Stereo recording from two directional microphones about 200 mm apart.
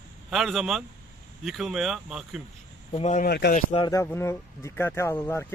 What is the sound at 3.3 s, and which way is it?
Speech, 55° left (ahead or behind).